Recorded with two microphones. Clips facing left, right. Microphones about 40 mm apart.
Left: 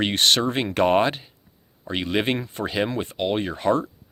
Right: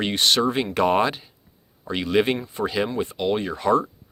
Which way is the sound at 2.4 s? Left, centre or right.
Left.